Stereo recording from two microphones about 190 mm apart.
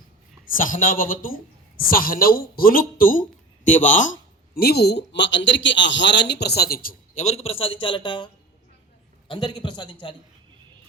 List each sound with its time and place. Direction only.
0.5 s a man's voice: 45° left (ahead or behind); by 10.2 s 25° left (ahead or behind)